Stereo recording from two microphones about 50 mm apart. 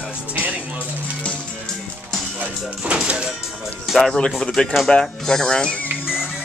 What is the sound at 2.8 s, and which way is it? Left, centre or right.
Speech, right.